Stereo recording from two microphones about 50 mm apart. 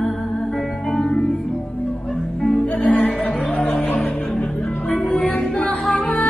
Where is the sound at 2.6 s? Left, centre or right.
Left.